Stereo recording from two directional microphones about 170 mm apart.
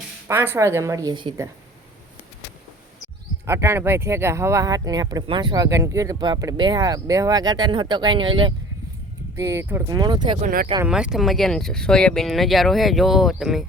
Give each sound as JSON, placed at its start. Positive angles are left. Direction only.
{"t": 0.3, "sound": "a woman's voice", "side_deg": -15}
{"t": 3.4, "sound": "speech", "side_deg": -15}
{"t": 9.3, "sound": "speech", "side_deg": -15}
{"t": 10.4, "sound": "speech", "side_deg": -60}
{"t": 10.8, "sound": "speech", "side_deg": -5}